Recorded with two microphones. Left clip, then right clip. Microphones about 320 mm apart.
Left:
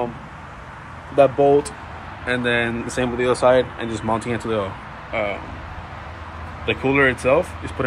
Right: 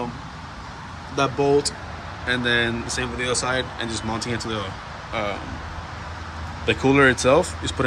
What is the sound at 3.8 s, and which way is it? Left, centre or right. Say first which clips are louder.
Speech: left 5 dB; centre.